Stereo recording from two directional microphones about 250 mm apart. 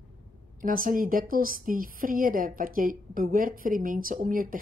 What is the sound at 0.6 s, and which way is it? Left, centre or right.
A woman's voice, right.